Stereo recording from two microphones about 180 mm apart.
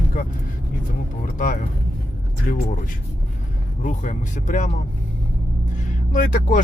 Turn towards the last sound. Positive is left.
turn(degrees=45)  # may be behind; listen again after turning